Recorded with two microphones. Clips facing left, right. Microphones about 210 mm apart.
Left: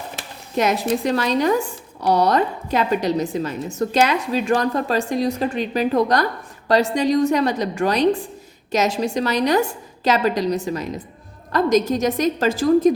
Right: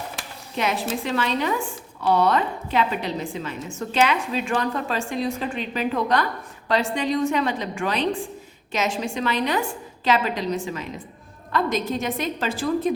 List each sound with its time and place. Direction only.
0.5 s a woman's voice: 40° left (ahead or behind)